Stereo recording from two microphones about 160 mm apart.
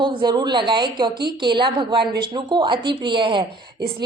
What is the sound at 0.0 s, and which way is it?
A woman's voice, 30° right (ahead or behind).